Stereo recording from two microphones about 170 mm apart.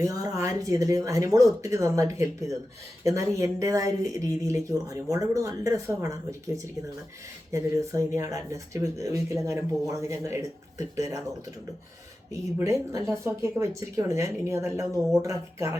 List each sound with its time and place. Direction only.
0.0 s speech: 20° right (ahead or behind)
12.3 s speech: 15° right (ahead or behind)